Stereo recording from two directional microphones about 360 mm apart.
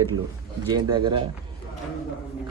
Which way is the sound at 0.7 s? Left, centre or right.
Centre.